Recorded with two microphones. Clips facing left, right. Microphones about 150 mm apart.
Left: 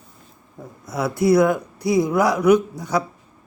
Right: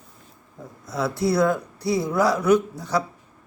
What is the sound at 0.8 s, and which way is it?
A man's voice, 20° left (ahead or behind).